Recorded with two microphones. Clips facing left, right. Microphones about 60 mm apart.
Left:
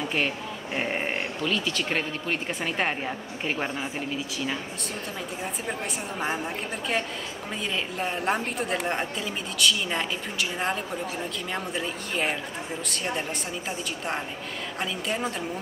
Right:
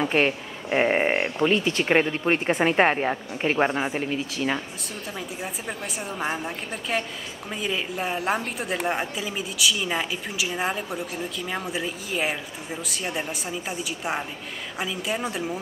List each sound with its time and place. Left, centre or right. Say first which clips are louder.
0.0 s speech: right 5 dB; right
5.4 s speech: left 1 dB; centre